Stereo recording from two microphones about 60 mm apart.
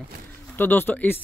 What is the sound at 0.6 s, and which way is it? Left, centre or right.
Speech, left.